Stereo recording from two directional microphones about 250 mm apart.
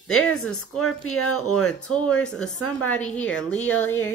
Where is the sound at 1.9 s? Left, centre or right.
Centre.